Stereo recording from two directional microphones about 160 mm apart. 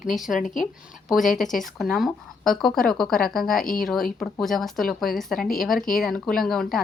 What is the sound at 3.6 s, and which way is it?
Speech, 60° left (ahead or behind).